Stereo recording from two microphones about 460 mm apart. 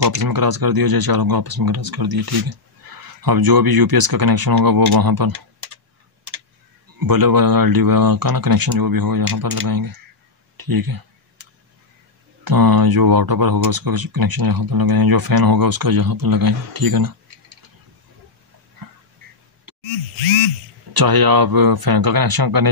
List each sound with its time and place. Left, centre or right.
0.0 s speech: right
7.0 s speech: right
10.6 s a sound: right
12.4 s speech: right
19.7 s a sound: right
20.9 s speech: right